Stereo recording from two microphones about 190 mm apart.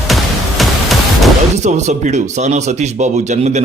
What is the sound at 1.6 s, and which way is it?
Speech, 35° right (ahead or behind).